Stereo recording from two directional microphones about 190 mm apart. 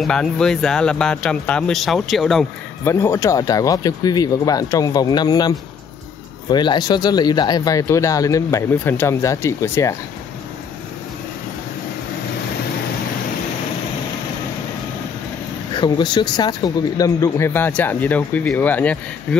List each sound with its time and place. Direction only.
0.0 s speech: 5° left (ahead or behind)
2.8 s speech: 15° left (ahead or behind)
6.5 s speech: 25° left (ahead or behind)
15.8 s speech: 25° left (ahead or behind)